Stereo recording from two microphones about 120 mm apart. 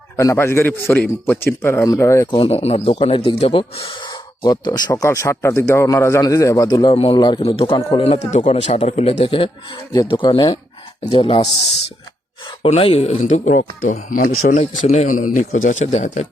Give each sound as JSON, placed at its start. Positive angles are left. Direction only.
{"t": 0.2, "sound": "a man's voice", "side_deg": 25}
{"t": 2.4, "sound": "speech", "side_deg": 60}
{"t": 5.0, "sound": "a man's voice", "side_deg": 25}
{"t": 6.9, "sound": "speech", "side_deg": 55}
{"t": 10.1, "sound": "speech", "side_deg": 40}
{"t": 11.0, "sound": "speech", "side_deg": 50}
{"t": 12.6, "sound": "speech", "side_deg": 55}